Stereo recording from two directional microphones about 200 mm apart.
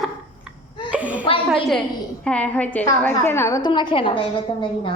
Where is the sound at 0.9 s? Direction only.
5° right (ahead or behind).